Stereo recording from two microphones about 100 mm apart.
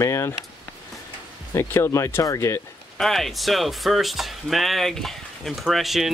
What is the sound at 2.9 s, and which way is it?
Speech, 5° left (ahead or behind).